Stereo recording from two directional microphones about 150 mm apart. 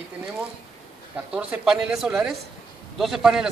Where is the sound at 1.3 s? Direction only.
10° right (ahead or behind).